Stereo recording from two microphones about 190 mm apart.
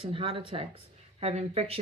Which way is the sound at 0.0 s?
30° right (ahead or behind).